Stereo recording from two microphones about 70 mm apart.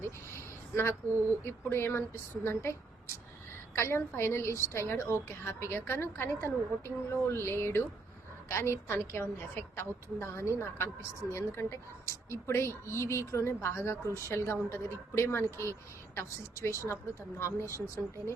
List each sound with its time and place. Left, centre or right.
0.0 s a sound: left
1.5 s speech: left
3.8 s a woman's voice: left